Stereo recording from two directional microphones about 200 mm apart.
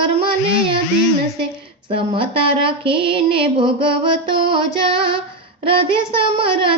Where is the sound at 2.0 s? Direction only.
25° right (ahead or behind).